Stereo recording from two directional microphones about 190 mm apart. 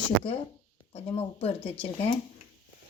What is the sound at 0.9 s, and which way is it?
Speech, 30° left (ahead or behind).